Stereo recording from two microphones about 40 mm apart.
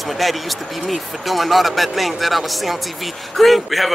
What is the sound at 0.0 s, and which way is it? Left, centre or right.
A man's voice, centre.